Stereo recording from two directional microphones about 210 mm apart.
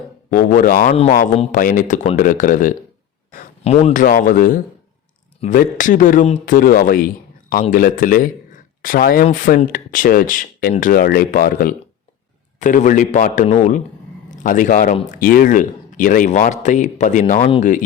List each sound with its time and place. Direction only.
0.3 s a man's voice: 40° left (ahead or behind)